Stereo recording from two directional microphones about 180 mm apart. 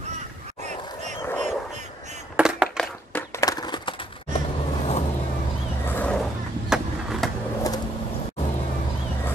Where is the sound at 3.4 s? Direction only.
20° left (ahead or behind).